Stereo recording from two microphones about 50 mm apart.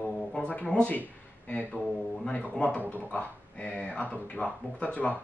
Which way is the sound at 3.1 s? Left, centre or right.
Left.